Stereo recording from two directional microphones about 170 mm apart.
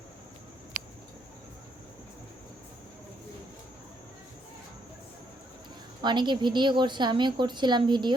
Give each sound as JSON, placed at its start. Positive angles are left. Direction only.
{"t": 6.0, "sound": "a woman's voice", "side_deg": -25}